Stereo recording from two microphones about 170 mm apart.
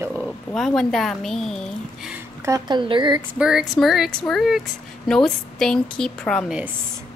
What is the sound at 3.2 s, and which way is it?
Speech, 5° right (ahead or behind).